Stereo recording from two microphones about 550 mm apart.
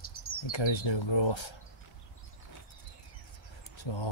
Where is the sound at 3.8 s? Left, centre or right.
Left.